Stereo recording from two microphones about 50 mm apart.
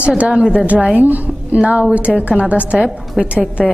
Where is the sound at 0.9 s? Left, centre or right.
Right.